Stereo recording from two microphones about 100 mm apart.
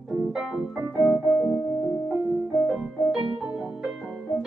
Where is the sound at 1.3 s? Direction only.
25° left (ahead or behind).